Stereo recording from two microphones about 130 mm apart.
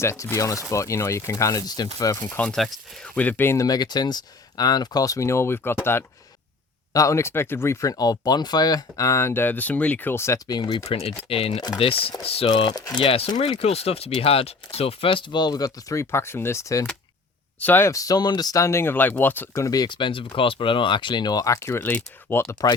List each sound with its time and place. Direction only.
0.0 s speech: 20° left (ahead or behind)
2.5 s speech: 5° left (ahead or behind); by 10.4 s 20° left (ahead or behind)
10.5 s speech: 30° left (ahead or behind)
11.3 s speech: 45° left (ahead or behind)
12.5 s speech: 35° left (ahead or behind)
13.0 s speech: 45° left (ahead or behind); by 19.6 s 15° left (ahead or behind)
19.6 s speech: 30° left (ahead or behind)